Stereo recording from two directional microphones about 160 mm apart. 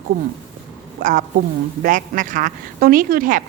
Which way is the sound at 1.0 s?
55° right (ahead or behind).